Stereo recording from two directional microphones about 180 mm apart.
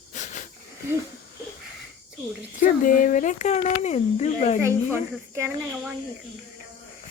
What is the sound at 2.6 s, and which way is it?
Speech, 50° left (ahead or behind).